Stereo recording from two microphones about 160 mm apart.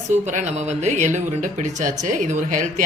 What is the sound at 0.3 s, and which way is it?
Speech, 50° right (ahead or behind).